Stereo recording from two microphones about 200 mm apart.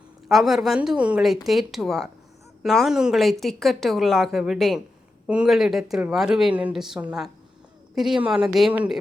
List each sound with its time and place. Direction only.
0.3 s a woman's voice: centre (ahead or behind)